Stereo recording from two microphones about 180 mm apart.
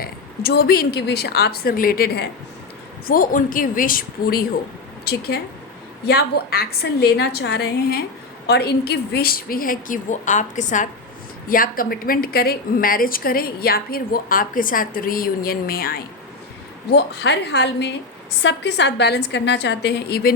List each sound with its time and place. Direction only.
0.0 s a woman's voice: 60° left (ahead or behind)
16.9 s a woman's voice: 70° left (ahead or behind)